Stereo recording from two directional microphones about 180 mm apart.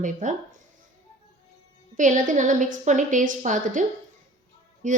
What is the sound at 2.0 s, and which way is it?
A woman's voice, 45° right (ahead or behind).